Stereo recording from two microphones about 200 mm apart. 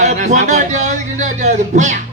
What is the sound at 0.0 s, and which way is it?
Speech, 35° right (ahead or behind).